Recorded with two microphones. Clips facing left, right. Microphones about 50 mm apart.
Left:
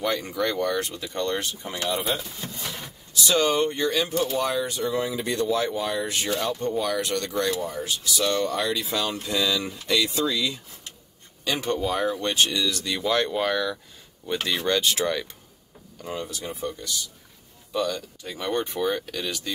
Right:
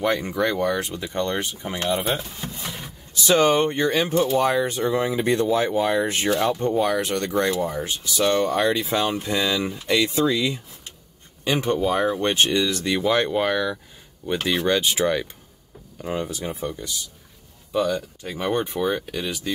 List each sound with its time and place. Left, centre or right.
0.0 s speech: right
0.4 s speech: centre
2.6 s a sound: centre
3.1 s speech: right; by 19.5 s centre